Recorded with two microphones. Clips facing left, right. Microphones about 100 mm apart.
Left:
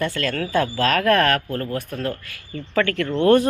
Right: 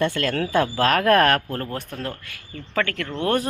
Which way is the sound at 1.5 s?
35° right (ahead or behind).